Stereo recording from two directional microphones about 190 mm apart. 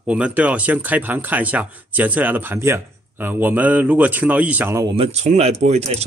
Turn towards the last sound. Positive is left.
turn(degrees=-35)  # may be behind; listen again after turning